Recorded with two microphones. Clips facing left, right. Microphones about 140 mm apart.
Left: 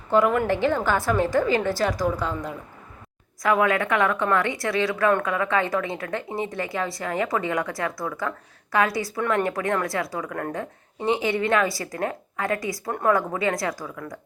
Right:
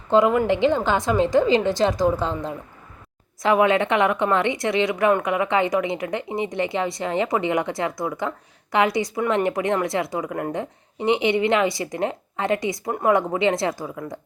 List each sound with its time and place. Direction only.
0.1 s speech: 20° right (ahead or behind)